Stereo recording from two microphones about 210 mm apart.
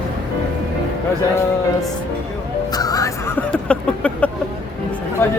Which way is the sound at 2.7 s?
15° left (ahead or behind).